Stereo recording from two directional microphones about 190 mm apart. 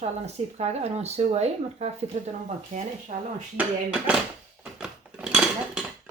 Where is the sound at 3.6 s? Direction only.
5° right (ahead or behind).